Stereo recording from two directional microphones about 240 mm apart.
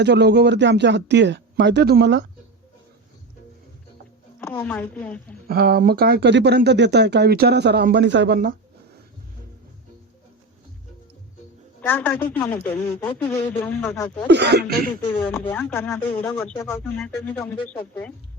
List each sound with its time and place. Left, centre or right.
0.0 s speech: right
4.4 s speech: centre
5.5 s speech: right
11.8 s a woman's voice: centre
14.3 s speech: right
15.3 s speech: centre